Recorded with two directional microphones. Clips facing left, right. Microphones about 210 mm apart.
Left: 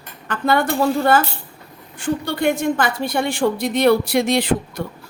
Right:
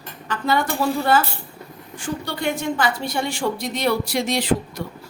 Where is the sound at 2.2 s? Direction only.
55° left (ahead or behind).